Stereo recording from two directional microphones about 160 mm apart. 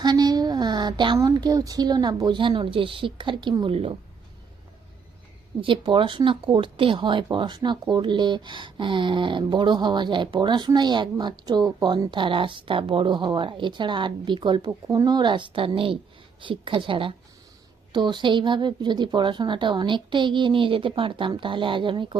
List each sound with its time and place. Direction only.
0.0 s speech: 25° right (ahead or behind)
5.5 s a woman's voice: 30° right (ahead or behind)